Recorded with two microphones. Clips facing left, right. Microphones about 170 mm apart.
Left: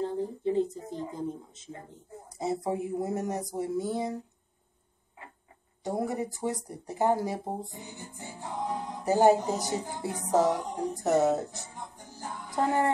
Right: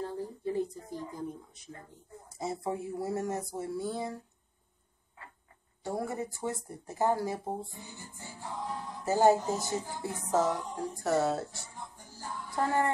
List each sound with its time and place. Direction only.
0.0 s a sound: 20° left (ahead or behind)
3.5 s speech: 20° left (ahead or behind)
5.9 s speech: 20° left (ahead or behind)